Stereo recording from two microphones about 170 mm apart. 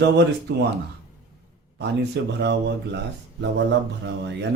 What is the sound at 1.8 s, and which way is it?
Speech, 85° right.